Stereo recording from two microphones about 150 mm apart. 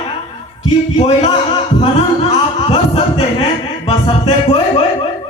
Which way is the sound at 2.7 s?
45° left (ahead or behind).